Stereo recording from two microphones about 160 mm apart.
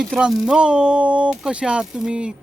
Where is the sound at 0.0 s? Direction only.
Centre (ahead or behind).